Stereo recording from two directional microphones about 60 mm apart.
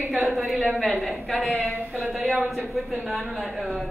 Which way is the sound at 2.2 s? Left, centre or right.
Centre.